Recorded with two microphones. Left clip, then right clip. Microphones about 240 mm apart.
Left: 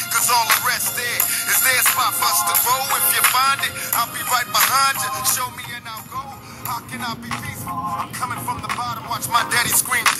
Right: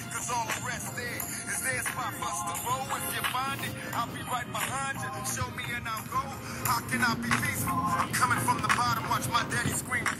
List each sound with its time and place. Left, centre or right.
0.2 s music: left
6.7 s speech: left
9.3 s music: left